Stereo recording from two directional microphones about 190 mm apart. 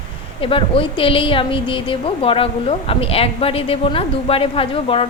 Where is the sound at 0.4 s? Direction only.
30° left (ahead or behind).